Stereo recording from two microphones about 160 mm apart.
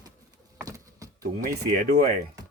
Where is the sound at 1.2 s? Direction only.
65° right (ahead or behind).